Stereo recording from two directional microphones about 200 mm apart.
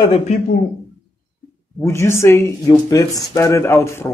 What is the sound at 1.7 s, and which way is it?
Speech, 15° left (ahead or behind).